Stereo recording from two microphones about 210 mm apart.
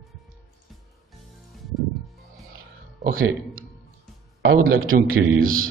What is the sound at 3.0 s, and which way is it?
A man's voice, 45° right (ahead or behind).